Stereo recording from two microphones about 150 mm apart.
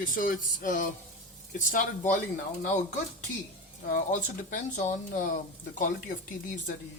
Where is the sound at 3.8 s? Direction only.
65° left (ahead or behind).